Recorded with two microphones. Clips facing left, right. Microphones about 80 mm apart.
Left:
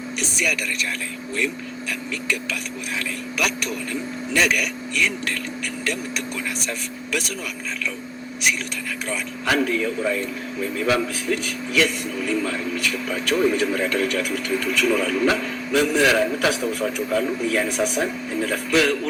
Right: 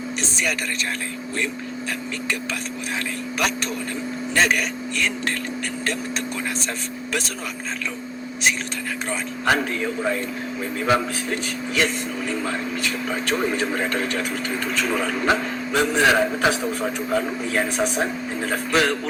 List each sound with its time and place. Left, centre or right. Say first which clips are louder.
0.2 s a sound: left 1 dB; right
3.3 s a man's voice: right 1 dB; right
7.1 s a man's voice: left 1 dB; right
9.0 s a man's voice: right 2 dB; right